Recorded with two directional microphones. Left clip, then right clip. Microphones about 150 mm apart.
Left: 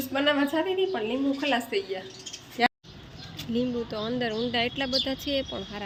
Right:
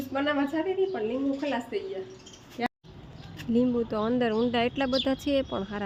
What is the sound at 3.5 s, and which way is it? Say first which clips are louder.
Speech: right 3 dB; 40° right (ahead or behind).